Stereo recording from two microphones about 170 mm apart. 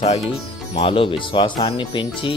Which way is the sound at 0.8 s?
30° left (ahead or behind).